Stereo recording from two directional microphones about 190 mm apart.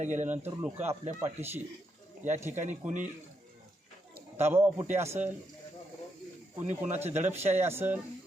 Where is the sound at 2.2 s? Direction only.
10° right (ahead or behind).